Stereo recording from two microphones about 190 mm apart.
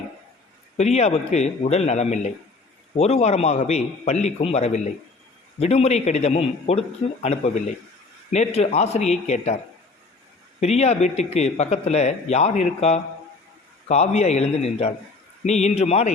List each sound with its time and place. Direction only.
0.8 s speech: 35° left (ahead or behind)
8.3 s speech: 35° left (ahead or behind)
10.6 s speech: 35° left (ahead or behind)